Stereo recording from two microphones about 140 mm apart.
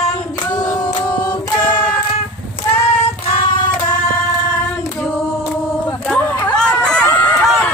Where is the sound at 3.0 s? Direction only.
40° left (ahead or behind).